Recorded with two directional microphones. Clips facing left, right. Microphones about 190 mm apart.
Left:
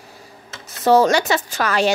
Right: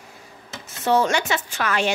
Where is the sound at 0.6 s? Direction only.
40° left (ahead or behind).